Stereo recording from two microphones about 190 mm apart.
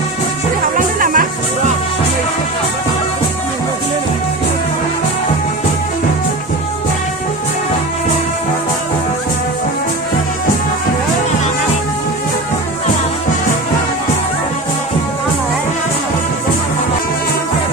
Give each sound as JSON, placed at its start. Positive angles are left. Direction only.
{"t": 0.9, "sound": "music", "side_deg": -45}